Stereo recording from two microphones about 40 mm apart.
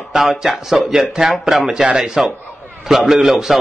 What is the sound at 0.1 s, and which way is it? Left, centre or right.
A man's voice, centre.